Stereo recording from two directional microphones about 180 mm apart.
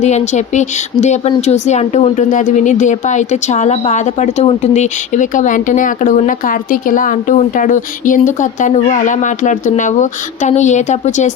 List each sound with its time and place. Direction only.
0.0 s speech: 40° left (ahead or behind)